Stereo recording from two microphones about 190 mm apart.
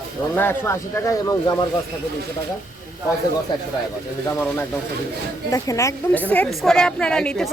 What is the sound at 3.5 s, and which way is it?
Speech, 20° left (ahead or behind).